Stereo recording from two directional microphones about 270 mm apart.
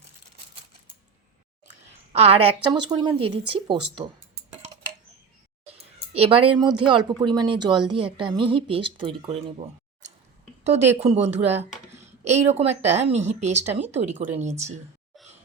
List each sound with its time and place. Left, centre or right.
2.1 s speech: right
5.7 s speech: right
10.7 s speech: right